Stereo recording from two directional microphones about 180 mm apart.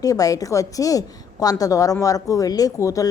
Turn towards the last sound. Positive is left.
turn(degrees=20)  # may be behind; listen again after turning